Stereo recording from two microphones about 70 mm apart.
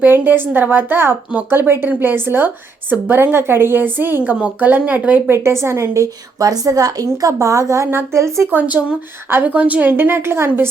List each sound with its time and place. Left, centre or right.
0.0 s a woman's voice: right
5.3 s a woman's voice: right
7.9 s a woman's voice: right
8.4 s a woman's voice: right